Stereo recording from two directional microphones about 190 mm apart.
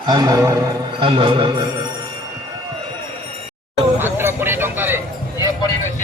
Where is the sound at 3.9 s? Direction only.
10° right (ahead or behind).